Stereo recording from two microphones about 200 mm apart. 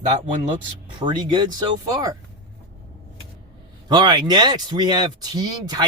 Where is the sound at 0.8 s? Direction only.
25° right (ahead or behind).